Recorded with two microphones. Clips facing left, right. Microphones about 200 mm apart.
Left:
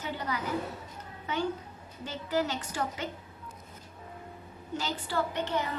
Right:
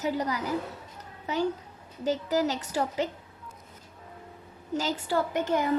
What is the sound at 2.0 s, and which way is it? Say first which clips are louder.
A woman's voice: right 5 dB; 40° right (ahead or behind).